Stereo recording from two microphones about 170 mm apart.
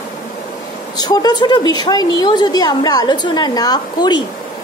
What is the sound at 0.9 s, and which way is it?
A woman's voice, 25° left (ahead or behind).